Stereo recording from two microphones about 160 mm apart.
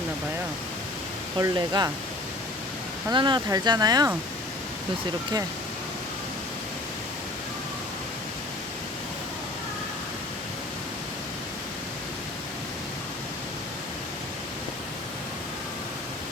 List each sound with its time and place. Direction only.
1.4 s speech: 25° right (ahead or behind)
3.1 s speech: 30° right (ahead or behind)